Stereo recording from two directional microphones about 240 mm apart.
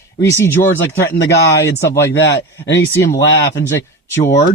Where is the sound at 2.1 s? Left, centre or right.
Left.